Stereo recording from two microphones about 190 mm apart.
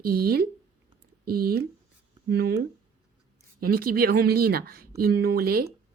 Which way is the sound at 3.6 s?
50° right (ahead or behind).